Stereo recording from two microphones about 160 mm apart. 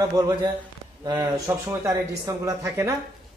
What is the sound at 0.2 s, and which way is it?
Speech, 20° right (ahead or behind).